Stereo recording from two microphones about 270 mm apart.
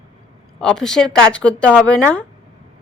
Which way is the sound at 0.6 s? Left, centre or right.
Centre.